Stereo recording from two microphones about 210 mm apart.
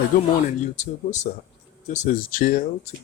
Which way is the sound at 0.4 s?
35° left (ahead or behind).